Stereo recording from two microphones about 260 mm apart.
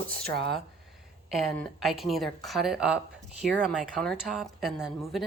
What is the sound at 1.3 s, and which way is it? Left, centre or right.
A woman's voice, centre.